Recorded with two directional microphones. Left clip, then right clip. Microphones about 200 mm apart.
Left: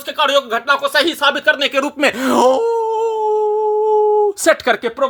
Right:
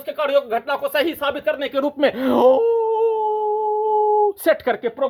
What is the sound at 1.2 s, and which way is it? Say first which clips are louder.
Speech: left 8 dB; 25° left (ahead or behind).